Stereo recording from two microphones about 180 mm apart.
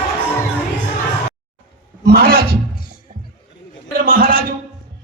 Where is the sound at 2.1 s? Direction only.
55° right (ahead or behind).